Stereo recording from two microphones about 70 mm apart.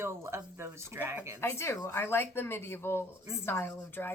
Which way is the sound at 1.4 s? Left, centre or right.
Left.